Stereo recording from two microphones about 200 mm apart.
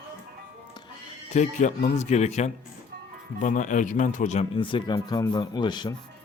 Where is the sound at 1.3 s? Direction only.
35° left (ahead or behind).